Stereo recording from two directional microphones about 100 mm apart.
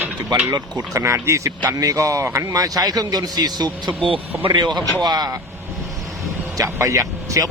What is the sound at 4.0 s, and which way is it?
Speech, 60° right (ahead or behind).